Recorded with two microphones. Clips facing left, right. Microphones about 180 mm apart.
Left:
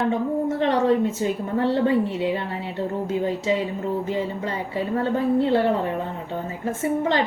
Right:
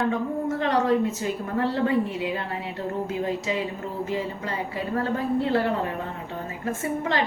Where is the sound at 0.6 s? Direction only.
30° left (ahead or behind).